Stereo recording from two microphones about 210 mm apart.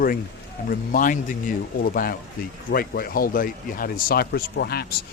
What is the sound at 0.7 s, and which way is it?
A man's voice, 40° left (ahead or behind).